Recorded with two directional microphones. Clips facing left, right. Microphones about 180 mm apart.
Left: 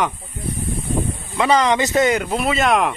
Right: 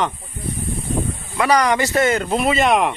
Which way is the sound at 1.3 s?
20° left (ahead or behind).